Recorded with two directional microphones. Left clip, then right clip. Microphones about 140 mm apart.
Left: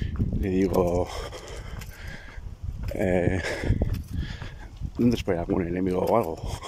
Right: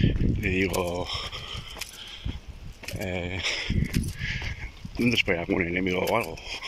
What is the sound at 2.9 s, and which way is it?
Speech, 60° left (ahead or behind).